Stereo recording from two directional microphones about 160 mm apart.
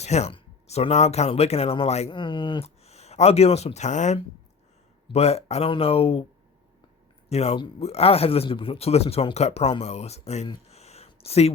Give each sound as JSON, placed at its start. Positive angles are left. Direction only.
{"t": 0.0, "sound": "speech", "side_deg": 45}
{"t": 7.3, "sound": "speech", "side_deg": 40}
{"t": 10.7, "sound": "a sound", "side_deg": 40}